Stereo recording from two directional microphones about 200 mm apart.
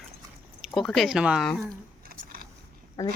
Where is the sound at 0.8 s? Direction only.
Centre (ahead or behind).